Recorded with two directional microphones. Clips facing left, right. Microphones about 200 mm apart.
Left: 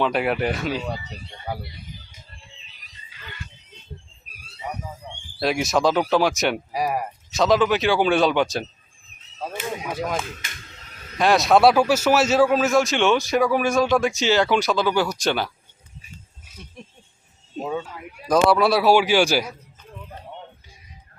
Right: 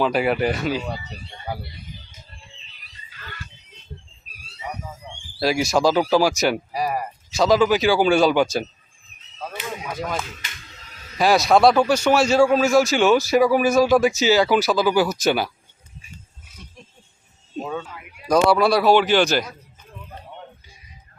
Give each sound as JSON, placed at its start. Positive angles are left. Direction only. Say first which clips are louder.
{"t": 0.0, "sound": "a man's voice", "louder": "right 2 dB", "side_deg": 0}
{"t": 3.2, "sound": "music", "louder": "right 1 dB", "side_deg": 15}
{"t": 5.4, "sound": "a man's voice", "louder": "right 2 dB", "side_deg": 0}
{"t": 9.9, "sound": "a man's voice", "louder": "even", "side_deg": 5}
{"t": 17.6, "sound": "speech", "louder": "left 1 dB", "side_deg": 10}
{"t": 18.3, "sound": "a man's voice", "louder": "right 1 dB", "side_deg": 0}